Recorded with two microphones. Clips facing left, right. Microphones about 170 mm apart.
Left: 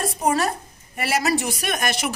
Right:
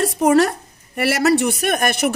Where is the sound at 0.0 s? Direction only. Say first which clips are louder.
Right 7 dB; 75° right (ahead or behind).